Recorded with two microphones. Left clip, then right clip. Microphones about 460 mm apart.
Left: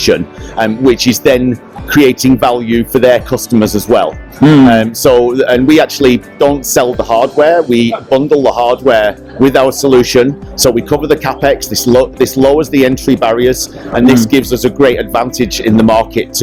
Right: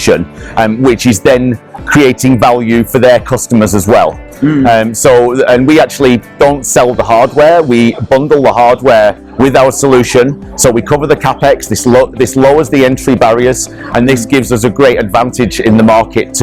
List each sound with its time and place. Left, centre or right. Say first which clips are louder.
0.6 s speech: right 1 dB; right